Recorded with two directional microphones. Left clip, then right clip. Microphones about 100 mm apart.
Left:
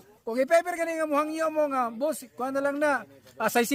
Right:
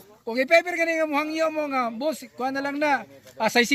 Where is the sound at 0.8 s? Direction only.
55° left (ahead or behind).